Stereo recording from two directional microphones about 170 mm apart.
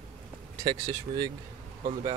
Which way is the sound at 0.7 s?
25° right (ahead or behind).